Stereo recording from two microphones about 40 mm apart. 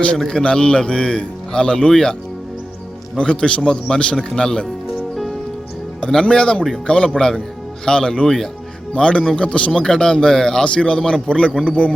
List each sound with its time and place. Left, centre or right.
0.3 s a man's voice: centre
3.2 s a man's voice: left
6.1 s a man's voice: centre
9.0 s a man's voice: left
9.9 s a man's voice: centre